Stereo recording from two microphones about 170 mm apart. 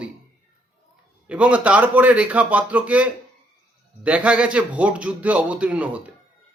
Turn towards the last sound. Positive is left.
turn(degrees=-5)  # may be behind; listen again after turning